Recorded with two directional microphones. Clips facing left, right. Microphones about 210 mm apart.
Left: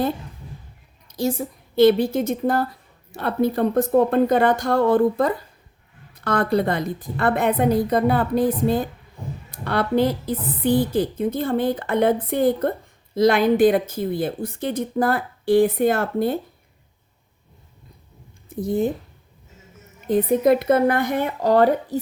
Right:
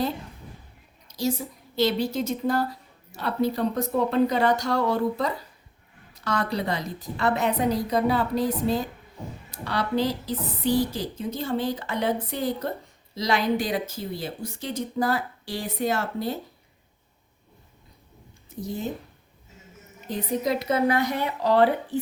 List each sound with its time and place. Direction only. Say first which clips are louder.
1.0 s a woman's voice: left 4 dB; 55° left (ahead or behind)
18.4 s speech: left 10 dB; 55° left (ahead or behind)
20.1 s speech: left 9 dB; 55° left (ahead or behind)